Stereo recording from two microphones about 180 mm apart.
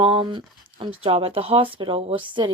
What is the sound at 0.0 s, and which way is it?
Speech, 30° right (ahead or behind).